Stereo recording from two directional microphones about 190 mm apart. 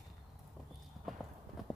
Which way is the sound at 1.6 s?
Centre (ahead or behind).